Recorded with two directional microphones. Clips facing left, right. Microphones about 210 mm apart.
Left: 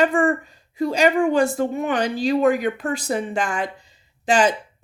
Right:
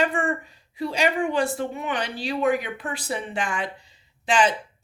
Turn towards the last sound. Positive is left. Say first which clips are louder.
# left 3 dB
turn(degrees=45)  # may be behind; listen again after turning